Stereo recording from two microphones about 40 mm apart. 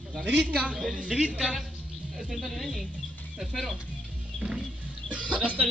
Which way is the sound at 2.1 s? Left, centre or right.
Centre.